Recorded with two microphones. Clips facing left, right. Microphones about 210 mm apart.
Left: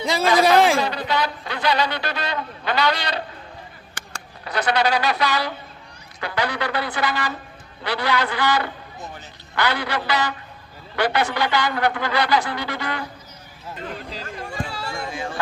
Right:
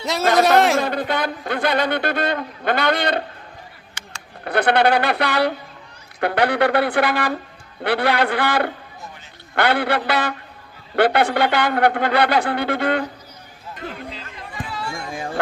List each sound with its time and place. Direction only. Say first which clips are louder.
0.0 s speech: right 1 dB; centre (ahead or behind)
0.8 s a man's voice: right 2 dB; 50° right (ahead or behind)
4.4 s a man's voice: right 5 dB; 55° right (ahead or behind)
14.1 s a sound: left 3 dB; 45° left (ahead or behind)